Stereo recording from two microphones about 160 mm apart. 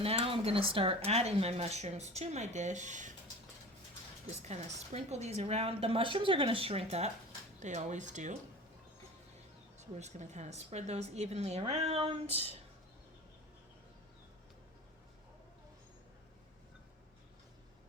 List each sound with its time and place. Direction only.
0.0 s speech: 40° right (ahead or behind)
4.3 s speech: 45° right (ahead or behind)
9.7 s speech: 45° right (ahead or behind)